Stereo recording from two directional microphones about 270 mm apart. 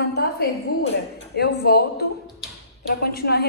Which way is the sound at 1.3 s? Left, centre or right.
Left.